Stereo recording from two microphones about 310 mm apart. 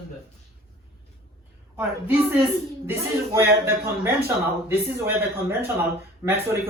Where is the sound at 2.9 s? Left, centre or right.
Centre.